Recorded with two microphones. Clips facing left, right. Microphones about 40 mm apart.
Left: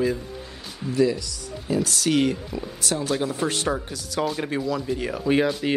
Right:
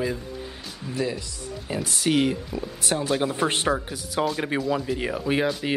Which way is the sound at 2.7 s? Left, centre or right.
Right.